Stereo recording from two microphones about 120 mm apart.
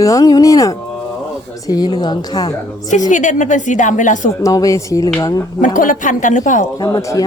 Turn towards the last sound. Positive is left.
turn(degrees=25)  # may be behind; listen again after turning